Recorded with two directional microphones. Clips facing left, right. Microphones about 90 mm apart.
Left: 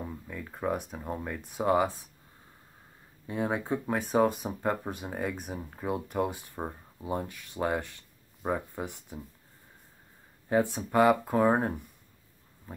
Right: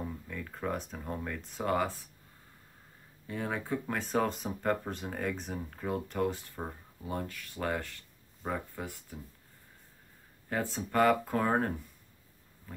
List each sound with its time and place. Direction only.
0.3 s speech: 15° left (ahead or behind)
3.3 s speech: 20° left (ahead or behind)
10.5 s speech: 15° left (ahead or behind)
12.7 s pig: 20° left (ahead or behind)